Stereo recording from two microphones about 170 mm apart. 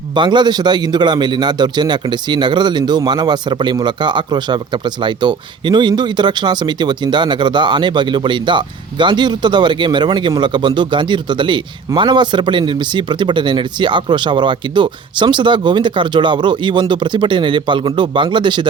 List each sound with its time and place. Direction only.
0.1 s a man's voice: 25° right (ahead or behind)